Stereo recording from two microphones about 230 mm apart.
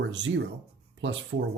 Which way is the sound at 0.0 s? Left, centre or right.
Right.